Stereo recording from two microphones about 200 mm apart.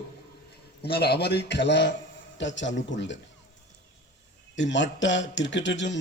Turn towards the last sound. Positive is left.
turn(degrees=65)  # may be behind; listen again after turning